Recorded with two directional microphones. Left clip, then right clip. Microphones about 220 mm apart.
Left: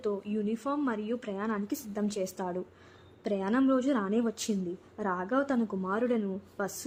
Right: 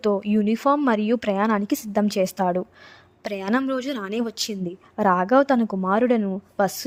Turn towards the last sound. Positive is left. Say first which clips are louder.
# right 11 dB
turn(degrees=-35)  # may be behind; listen again after turning